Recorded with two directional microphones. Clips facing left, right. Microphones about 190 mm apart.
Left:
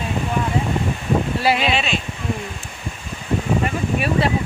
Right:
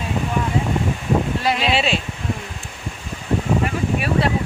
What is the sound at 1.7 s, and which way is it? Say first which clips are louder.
Speech: right 2 dB; 35° right (ahead or behind).